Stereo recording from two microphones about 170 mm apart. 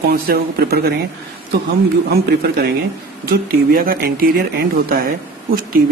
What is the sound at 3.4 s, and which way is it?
Speech, 60° right (ahead or behind).